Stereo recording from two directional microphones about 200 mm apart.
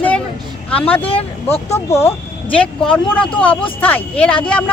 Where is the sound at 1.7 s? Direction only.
15° left (ahead or behind).